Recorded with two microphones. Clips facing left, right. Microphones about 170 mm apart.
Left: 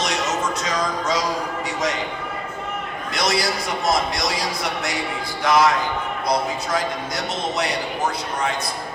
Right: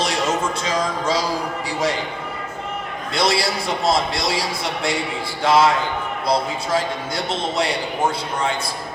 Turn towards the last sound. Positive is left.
turn(degrees=-30)  # may be behind; listen again after turning